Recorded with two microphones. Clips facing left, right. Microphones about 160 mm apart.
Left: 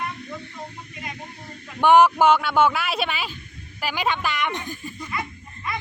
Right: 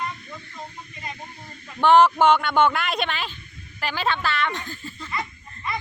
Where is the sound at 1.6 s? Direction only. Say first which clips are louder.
Left 1 dB; 10° left (ahead or behind).